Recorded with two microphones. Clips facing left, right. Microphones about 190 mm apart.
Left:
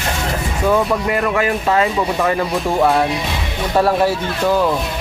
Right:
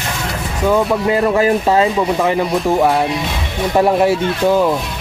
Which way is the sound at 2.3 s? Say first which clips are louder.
Right 3 dB; 20° right (ahead or behind).